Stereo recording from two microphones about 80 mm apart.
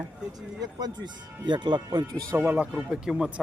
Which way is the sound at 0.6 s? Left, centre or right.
Right.